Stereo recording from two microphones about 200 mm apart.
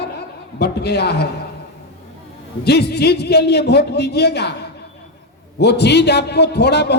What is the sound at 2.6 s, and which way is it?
A man's voice, 55° left (ahead or behind).